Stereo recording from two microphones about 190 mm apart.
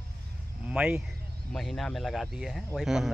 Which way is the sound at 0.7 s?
5° right (ahead or behind).